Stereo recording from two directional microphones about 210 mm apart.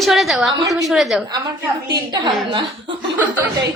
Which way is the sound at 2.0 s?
20° right (ahead or behind).